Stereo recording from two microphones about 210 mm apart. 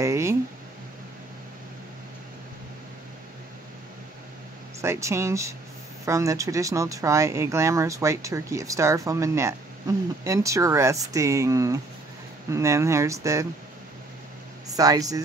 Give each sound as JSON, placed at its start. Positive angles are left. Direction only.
{"t": 0.0, "sound": "a sound", "side_deg": -15}
{"t": 4.8, "sound": "speech", "side_deg": -15}
{"t": 14.7, "sound": "speech", "side_deg": -15}